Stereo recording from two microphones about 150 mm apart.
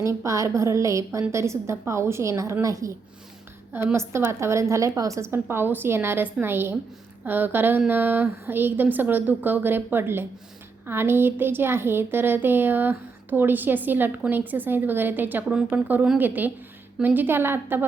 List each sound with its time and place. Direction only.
0.0 s a woman's voice: 20° right (ahead or behind)